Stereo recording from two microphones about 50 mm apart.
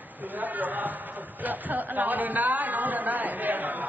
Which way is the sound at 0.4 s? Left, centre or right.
Right.